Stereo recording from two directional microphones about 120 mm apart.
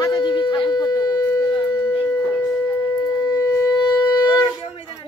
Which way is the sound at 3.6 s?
35° left (ahead or behind).